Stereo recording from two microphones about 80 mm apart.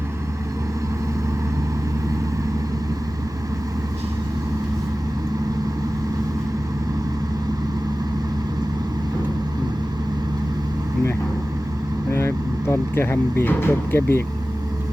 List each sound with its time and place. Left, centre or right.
12.1 s vehicle: left